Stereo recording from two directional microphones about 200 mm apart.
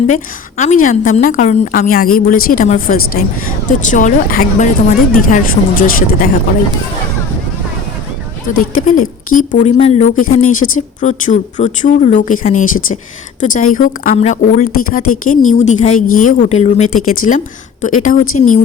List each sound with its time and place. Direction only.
0.1 s speech: 35° left (ahead or behind)
8.9 s speech: 40° left (ahead or behind)
17.8 s speech: 40° left (ahead or behind)